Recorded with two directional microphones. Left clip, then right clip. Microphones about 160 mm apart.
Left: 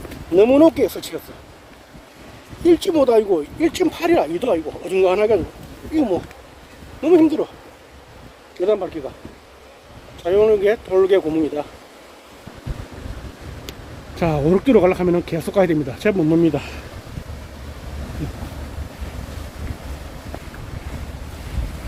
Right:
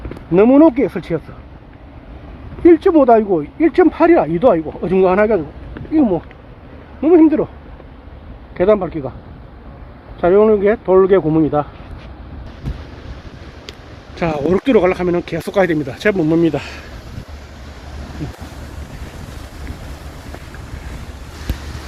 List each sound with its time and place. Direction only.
0.3 s speech: 20° left (ahead or behind)
2.6 s speech: 15° left (ahead or behind)
8.6 s speech: centre (ahead or behind)
10.2 s speech: 5° left (ahead or behind)
14.2 s speech: centre (ahead or behind)